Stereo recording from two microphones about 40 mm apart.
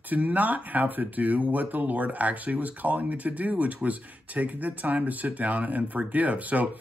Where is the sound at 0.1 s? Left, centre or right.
Right.